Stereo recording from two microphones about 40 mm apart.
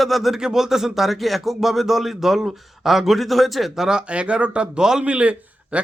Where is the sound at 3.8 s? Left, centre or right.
Right.